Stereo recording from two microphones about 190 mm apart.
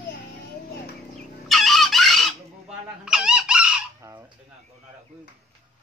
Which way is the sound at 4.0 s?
15° right (ahead or behind).